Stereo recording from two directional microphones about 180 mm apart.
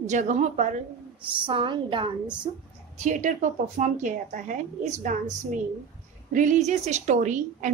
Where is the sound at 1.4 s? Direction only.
30° right (ahead or behind).